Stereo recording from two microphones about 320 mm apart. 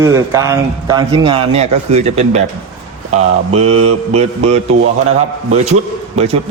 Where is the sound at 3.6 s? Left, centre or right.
Right.